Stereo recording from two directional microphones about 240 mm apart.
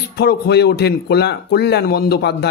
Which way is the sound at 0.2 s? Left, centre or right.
Left.